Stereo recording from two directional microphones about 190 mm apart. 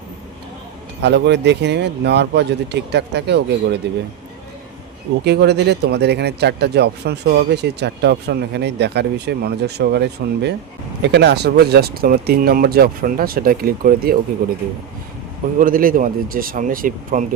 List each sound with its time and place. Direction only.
1.0 s speech: 65° right (ahead or behind)
5.2 s speech: 60° right (ahead or behind); by 17.2 s 45° right (ahead or behind)